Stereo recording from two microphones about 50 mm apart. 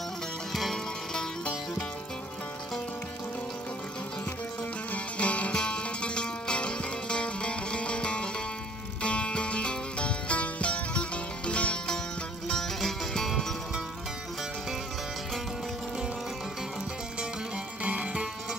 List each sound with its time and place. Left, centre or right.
0.5 s music: centre
4.9 s music: left
12.4 s music: centre
17.8 s music: right